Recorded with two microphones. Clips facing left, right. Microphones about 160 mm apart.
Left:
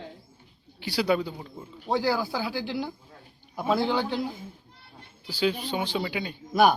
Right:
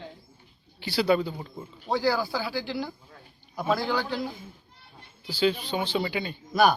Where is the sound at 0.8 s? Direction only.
10° left (ahead or behind).